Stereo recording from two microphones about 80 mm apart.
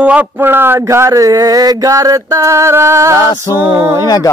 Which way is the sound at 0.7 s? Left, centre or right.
Right.